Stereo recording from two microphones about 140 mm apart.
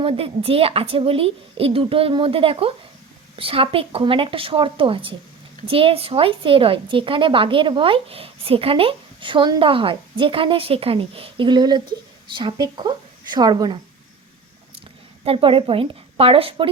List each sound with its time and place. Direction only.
0.0 s a woman's voice: 45° right (ahead or behind)
15.2 s a woman's voice: 40° right (ahead or behind)